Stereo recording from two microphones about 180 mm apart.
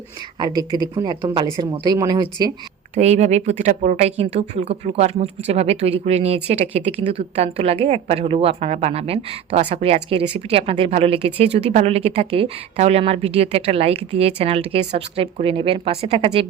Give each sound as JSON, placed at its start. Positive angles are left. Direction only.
{"t": 0.3, "sound": "speech", "side_deg": -20}
{"t": 2.9, "sound": "speech", "side_deg": -35}